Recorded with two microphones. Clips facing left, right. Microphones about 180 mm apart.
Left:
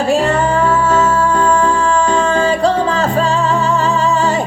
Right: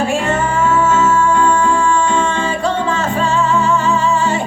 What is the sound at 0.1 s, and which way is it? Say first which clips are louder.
Music: left 4 dB; 35° left (ahead or behind).